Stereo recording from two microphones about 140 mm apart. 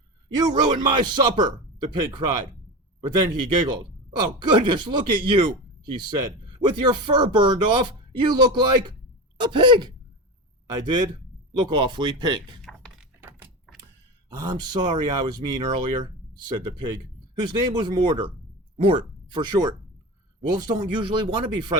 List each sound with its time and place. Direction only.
0.3 s speech: 30° right (ahead or behind)
3.7 s speech: 35° right (ahead or behind)
14.3 s speech: 30° right (ahead or behind)